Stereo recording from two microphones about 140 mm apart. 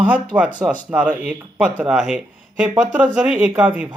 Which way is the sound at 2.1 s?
5° right (ahead or behind).